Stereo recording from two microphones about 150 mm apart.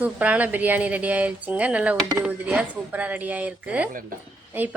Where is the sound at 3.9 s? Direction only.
70° right (ahead or behind).